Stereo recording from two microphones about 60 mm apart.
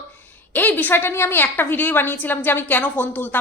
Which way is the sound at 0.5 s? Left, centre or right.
Left.